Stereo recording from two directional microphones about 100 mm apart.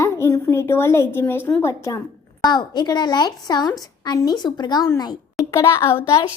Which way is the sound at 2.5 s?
45° left (ahead or behind).